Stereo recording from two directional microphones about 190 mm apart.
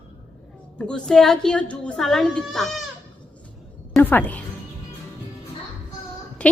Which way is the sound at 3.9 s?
10° left (ahead or behind).